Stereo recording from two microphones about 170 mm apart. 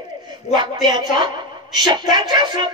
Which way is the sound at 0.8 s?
25° right (ahead or behind).